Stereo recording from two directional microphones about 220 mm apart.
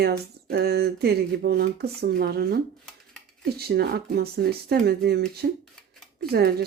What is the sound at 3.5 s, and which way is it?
Speech, 45° right (ahead or behind).